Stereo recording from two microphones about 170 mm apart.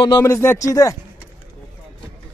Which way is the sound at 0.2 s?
15° left (ahead or behind).